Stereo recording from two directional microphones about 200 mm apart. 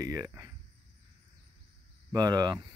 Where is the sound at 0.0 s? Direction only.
15° right (ahead or behind).